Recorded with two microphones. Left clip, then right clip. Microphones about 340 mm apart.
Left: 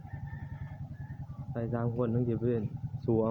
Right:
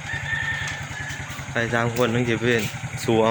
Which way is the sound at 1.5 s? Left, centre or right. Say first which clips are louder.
Right 12 dB; left.